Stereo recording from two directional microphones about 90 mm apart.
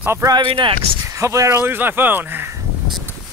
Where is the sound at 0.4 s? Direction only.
70° right (ahead or behind).